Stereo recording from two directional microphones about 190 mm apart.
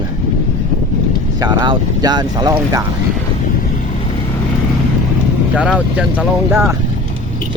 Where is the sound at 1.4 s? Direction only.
20° right (ahead or behind).